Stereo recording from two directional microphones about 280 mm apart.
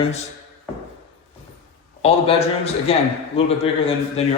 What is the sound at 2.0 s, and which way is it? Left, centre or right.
A man's voice, left.